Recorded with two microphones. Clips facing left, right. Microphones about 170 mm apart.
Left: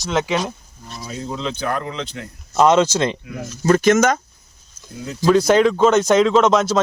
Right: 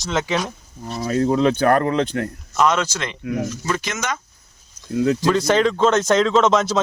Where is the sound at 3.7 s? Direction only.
45° left (ahead or behind).